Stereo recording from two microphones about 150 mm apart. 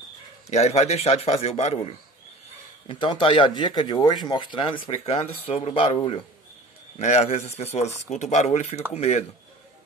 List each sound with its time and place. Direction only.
0.5 s speech: 45° left (ahead or behind)
2.9 s speech: 35° left (ahead or behind)
7.0 s speech: 50° left (ahead or behind)